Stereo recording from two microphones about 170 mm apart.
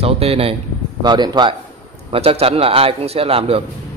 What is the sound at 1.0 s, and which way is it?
A man's voice, 25° right (ahead or behind).